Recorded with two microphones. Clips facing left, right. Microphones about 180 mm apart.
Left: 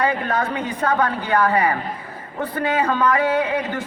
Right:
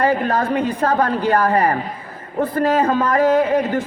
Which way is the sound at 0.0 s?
30° right (ahead or behind).